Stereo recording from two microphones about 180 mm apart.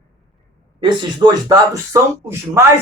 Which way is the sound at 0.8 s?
25° right (ahead or behind).